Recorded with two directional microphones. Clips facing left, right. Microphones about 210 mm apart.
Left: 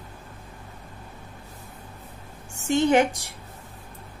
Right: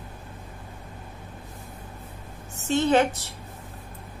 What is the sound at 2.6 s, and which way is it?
Speech, 15° left (ahead or behind).